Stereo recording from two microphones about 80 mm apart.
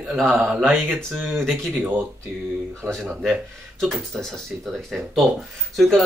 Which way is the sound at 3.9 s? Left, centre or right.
Centre.